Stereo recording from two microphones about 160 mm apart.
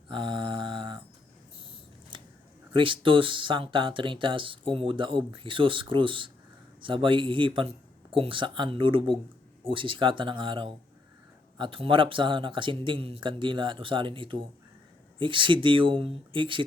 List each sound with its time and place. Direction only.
0.1 s mantra: 30° right (ahead or behind)
2.1 s a sound: 30° right (ahead or behind)
2.7 s speech: 30° right (ahead or behind)